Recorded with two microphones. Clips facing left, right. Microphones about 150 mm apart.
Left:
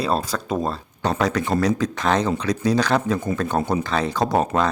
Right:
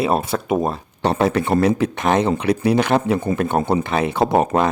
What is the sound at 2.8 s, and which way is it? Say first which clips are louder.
Speech: right 3 dB; 25° right (ahead or behind).